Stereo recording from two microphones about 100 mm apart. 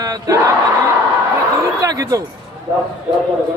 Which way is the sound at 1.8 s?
35° right (ahead or behind).